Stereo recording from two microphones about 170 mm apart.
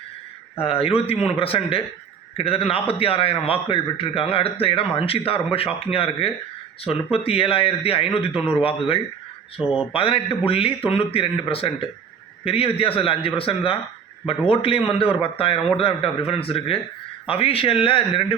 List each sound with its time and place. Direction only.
0.6 s a man's voice: 35° left (ahead or behind)